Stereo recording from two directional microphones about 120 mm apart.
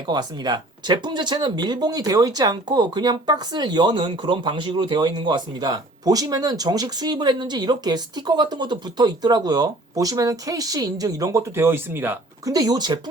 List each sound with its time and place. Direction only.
0.1 s speech: 35° right (ahead or behind); by 12.2 s 15° right (ahead or behind)
12.5 s speech: 30° right (ahead or behind)